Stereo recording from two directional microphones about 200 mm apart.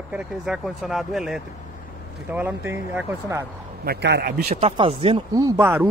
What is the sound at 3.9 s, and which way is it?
Speech, 55° right (ahead or behind).